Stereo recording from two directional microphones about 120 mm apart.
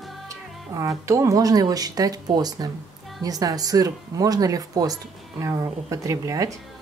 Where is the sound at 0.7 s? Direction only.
25° right (ahead or behind).